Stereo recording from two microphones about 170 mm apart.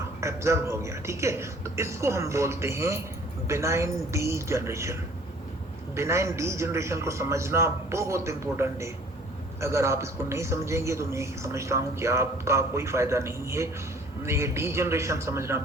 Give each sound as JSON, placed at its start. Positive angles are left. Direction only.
{"t": 0.2, "sound": "a man's voice", "side_deg": -15}
{"t": 6.0, "sound": "a man's voice", "side_deg": -15}